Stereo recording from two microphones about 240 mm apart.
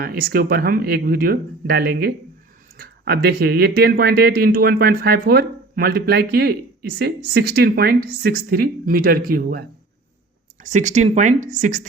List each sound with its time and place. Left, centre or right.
0.0 s speech: right